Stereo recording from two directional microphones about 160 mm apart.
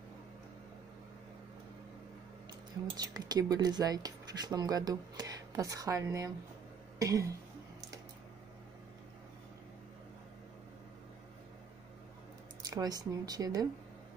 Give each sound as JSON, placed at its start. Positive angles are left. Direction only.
{"t": 3.0, "sound": "speech", "side_deg": -25}
{"t": 12.6, "sound": "speech", "side_deg": -20}